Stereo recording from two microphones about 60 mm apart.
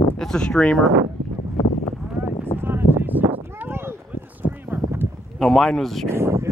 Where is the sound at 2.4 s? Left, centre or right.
Right.